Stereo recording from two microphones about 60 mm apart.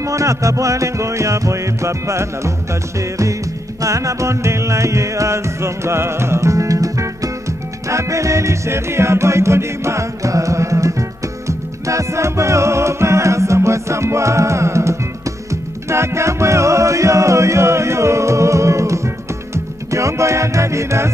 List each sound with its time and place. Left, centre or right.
0.0 s music: right